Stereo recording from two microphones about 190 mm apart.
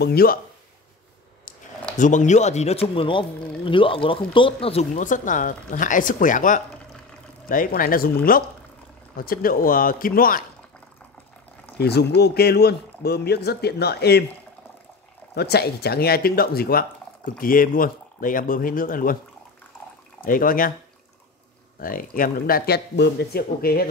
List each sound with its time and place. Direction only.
0.0 s speech: 55° left (ahead or behind)
2.0 s speech: 40° left (ahead or behind)
11.8 s speech: 60° left (ahead or behind)
15.3 s speech: 60° left (ahead or behind)
20.2 s speech: 45° left (ahead or behind)
21.7 s speech: 50° left (ahead or behind)